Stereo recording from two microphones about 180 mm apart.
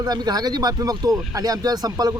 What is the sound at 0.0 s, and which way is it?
Speech, 20° right (ahead or behind).